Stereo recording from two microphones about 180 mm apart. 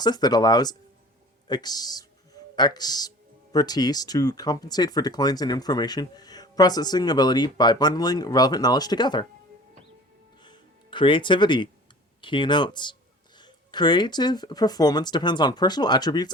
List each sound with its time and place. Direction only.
0.0 s speech: 25° left (ahead or behind)
10.4 s music: 25° left (ahead or behind)
12.2 s speech: 25° left (ahead or behind)